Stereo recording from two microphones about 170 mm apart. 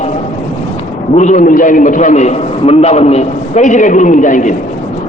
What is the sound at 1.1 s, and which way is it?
A man's voice, 45° left (ahead or behind).